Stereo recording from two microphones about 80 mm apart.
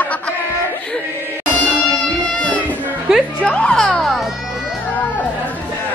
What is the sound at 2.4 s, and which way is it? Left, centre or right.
Music, centre.